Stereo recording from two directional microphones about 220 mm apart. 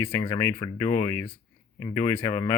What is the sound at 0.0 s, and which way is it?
Speech, 10° left (ahead or behind).